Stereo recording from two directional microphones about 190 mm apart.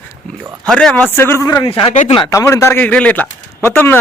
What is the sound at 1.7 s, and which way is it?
Speech, 30° left (ahead or behind).